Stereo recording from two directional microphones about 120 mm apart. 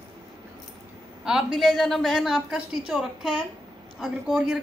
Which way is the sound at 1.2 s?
5° right (ahead or behind).